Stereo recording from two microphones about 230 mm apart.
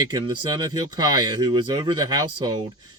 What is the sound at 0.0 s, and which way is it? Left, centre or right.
Speech, centre.